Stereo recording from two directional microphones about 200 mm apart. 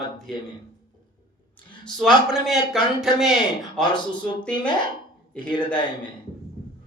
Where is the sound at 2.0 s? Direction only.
Centre (ahead or behind).